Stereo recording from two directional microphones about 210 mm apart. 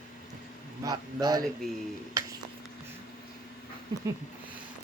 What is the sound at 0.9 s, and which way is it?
Speech, 15° right (ahead or behind).